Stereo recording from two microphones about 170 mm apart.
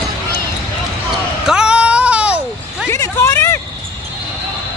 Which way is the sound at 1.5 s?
5° right (ahead or behind).